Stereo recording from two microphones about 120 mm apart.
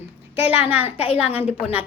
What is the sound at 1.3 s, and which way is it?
Speech, 60° left (ahead or behind).